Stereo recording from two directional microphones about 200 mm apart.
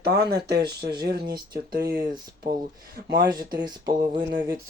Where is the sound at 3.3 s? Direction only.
20° right (ahead or behind).